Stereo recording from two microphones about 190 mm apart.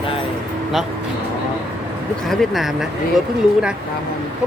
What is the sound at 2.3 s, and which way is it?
Speech, centre (ahead or behind).